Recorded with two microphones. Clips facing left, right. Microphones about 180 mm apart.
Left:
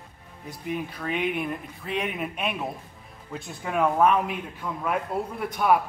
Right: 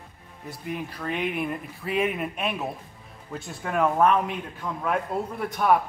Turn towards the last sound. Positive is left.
turn(degrees=0)  # may be behind; listen again after turning